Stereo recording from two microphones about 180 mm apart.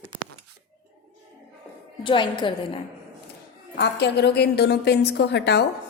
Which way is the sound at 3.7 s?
70° left (ahead or behind).